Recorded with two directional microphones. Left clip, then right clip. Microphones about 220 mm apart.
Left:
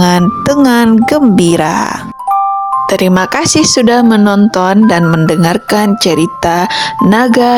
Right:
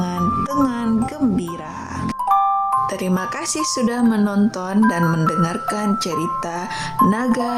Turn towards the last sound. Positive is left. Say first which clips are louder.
# left 12 dB
turn(degrees=35)  # may be behind; listen again after turning